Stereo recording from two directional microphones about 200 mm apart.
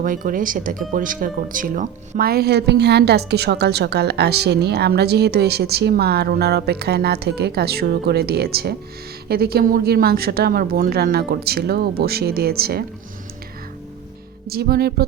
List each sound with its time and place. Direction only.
0.0 s speech: 45° right (ahead or behind)
14.4 s speech: 50° right (ahead or behind)